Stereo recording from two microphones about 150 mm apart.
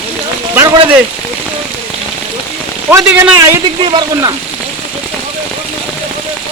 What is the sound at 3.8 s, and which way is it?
Speech, 30° right (ahead or behind).